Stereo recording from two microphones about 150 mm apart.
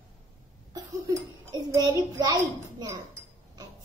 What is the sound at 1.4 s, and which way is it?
A child's voice, 25° right (ahead or behind).